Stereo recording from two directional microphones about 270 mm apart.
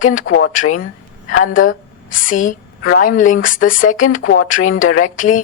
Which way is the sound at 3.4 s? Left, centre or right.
Left.